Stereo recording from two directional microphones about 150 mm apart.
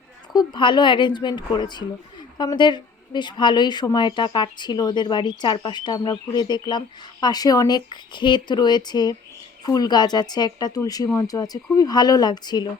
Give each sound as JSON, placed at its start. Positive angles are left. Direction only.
{"t": 0.3, "sound": "speech", "side_deg": 30}